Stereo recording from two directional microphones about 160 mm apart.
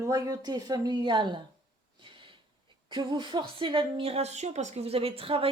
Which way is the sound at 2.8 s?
30° right (ahead or behind).